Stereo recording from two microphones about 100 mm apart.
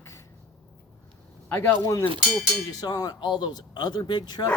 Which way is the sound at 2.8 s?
40° left (ahead or behind).